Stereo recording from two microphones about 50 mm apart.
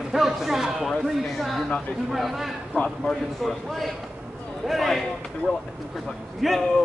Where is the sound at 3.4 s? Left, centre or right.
Centre.